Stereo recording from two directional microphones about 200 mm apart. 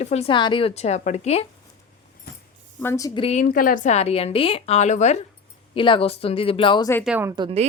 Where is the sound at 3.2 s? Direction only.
35° left (ahead or behind).